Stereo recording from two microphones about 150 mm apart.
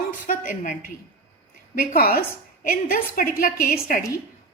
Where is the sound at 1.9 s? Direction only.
85° left.